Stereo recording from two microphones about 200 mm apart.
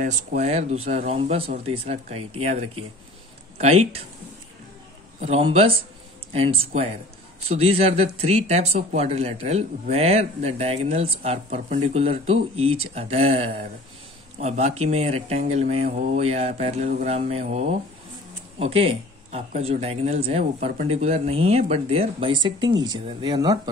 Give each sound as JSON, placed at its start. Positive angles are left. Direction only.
{"t": 0.0, "sound": "speech", "side_deg": -40}
{"t": 5.2, "sound": "speech", "side_deg": -30}